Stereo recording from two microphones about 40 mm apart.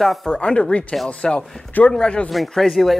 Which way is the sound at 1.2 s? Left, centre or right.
Centre.